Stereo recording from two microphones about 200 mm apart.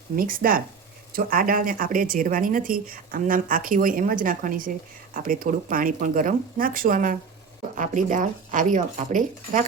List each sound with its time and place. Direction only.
0.2 s speech: 45° right (ahead or behind)